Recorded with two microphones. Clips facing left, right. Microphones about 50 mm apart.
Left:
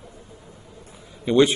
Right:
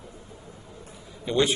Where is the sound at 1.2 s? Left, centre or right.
Left.